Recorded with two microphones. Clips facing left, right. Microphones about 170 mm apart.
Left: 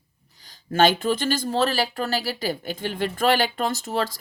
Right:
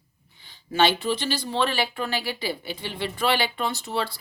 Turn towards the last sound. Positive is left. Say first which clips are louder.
# left 3 dB
turn(degrees=45)  # may be behind; listen again after turning